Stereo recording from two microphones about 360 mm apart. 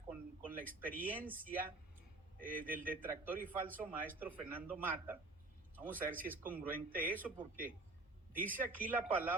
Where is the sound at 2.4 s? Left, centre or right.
Right.